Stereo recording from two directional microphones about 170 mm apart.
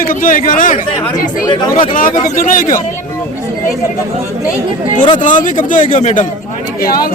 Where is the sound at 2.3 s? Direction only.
55° left (ahead or behind).